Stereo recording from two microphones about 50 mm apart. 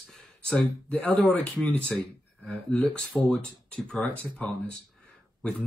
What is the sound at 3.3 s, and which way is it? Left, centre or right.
Speech, left.